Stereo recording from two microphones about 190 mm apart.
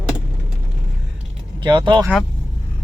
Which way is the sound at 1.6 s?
25° right (ahead or behind).